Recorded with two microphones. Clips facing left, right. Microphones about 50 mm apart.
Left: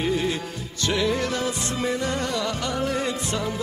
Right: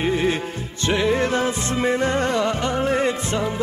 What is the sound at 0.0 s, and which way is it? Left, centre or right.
Music, right.